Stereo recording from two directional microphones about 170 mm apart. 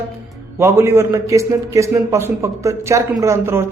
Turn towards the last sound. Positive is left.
turn(degrees=-15)  # may be behind; listen again after turning